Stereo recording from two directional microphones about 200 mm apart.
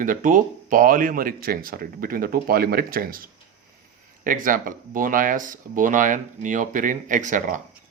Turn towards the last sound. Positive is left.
turn(degrees=-40)  # may be behind; listen again after turning